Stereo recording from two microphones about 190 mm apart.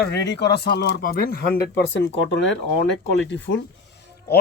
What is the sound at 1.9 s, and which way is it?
Speech, 65° left (ahead or behind).